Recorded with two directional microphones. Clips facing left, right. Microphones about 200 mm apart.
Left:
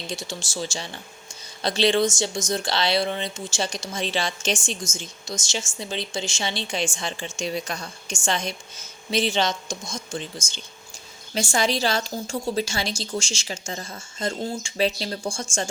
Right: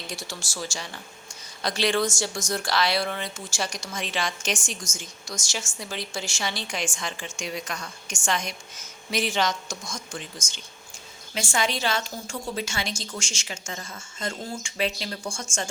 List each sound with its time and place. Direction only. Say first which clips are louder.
0.1 s a woman's voice: left 4 dB; 20° left (ahead or behind)
11.5 s a woman's voice: left 3 dB; 35° left (ahead or behind)